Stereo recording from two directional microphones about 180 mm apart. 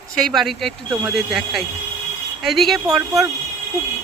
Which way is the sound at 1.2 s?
Centre (ahead or behind).